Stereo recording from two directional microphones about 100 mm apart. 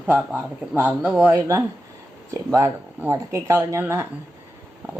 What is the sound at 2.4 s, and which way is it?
Speech, 30° right (ahead or behind).